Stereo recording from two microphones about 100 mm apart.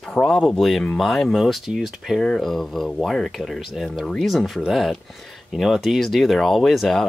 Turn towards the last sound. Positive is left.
turn(degrees=0)  # may be behind; listen again after turning